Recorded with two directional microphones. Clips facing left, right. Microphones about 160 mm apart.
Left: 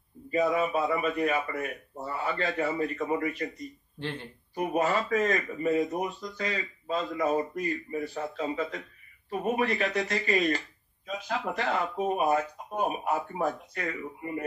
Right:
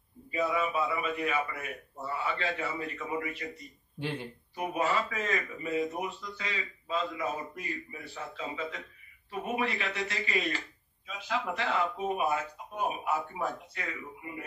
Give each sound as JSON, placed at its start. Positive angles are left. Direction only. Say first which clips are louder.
{"t": 0.3, "sound": "speech", "louder": "left 4 dB", "side_deg": 45}
{"t": 4.0, "sound": "speech", "louder": "right 1 dB", "side_deg": -10}
{"t": 4.6, "sound": "speech", "louder": "left 3 dB", "side_deg": 45}